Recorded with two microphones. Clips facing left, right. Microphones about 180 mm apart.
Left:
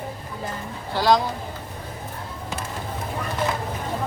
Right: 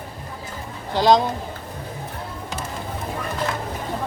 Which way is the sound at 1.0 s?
20° right (ahead or behind).